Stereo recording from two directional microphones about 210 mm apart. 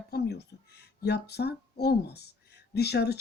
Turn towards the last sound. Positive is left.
turn(degrees=50)  # may be behind; listen again after turning